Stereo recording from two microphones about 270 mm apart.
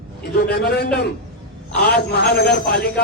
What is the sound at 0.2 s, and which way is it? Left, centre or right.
A man's voice, left.